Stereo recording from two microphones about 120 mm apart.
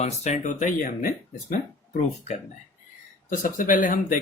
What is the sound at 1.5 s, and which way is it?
Speech, 70° left (ahead or behind).